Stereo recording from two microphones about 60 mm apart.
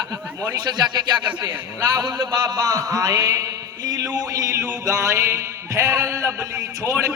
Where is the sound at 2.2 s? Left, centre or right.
Right.